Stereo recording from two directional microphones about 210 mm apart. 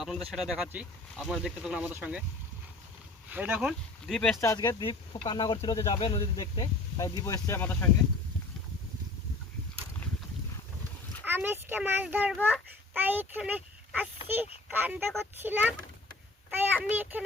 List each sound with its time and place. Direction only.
0.0 s speech: centre (ahead or behind)
3.2 s speech: 10° right (ahead or behind)
4.4 s speech: 15° left (ahead or behind)
11.3 s a child's voice: 10° right (ahead or behind)